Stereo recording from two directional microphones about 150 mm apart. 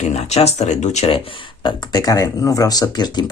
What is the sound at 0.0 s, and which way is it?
Speech, 45° left (ahead or behind).